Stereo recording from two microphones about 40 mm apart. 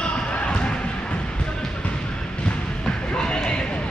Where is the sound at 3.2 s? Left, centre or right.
Left.